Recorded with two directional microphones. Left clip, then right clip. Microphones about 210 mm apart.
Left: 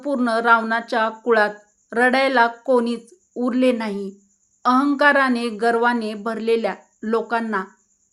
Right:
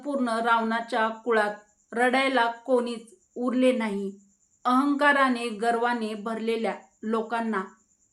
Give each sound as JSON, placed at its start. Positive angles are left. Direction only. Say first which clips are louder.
{"t": 0.0, "sound": "speech", "louder": "left 7 dB", "side_deg": 45}